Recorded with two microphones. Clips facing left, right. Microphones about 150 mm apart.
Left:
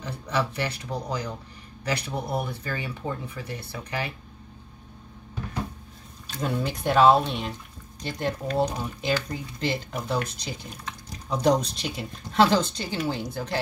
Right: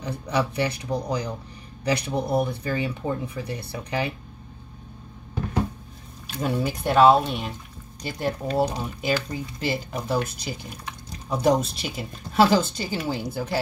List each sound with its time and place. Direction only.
0.0 s speech: 15° right (ahead or behind)
6.3 s speech: 10° right (ahead or behind)